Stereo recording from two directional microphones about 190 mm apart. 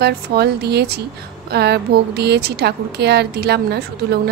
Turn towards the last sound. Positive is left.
turn(degrees=-60)  # may be behind; listen again after turning